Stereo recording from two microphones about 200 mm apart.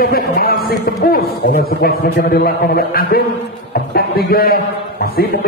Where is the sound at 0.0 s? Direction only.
50° left (ahead or behind).